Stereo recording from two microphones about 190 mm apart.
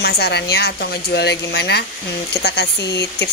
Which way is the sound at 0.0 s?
60° left (ahead or behind).